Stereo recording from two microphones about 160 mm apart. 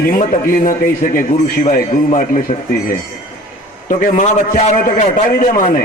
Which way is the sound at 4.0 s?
55° left (ahead or behind).